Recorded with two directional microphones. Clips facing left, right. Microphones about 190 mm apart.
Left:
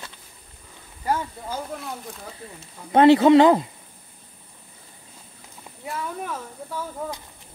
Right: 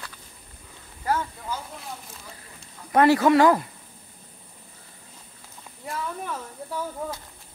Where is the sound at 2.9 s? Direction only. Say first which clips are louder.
Left 4 dB; 25° left (ahead or behind).